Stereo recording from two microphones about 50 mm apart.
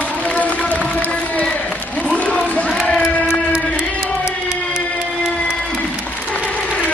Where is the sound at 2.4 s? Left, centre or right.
Left.